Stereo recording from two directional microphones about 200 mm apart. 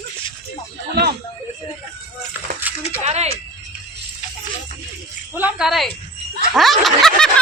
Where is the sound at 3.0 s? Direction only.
35° right (ahead or behind).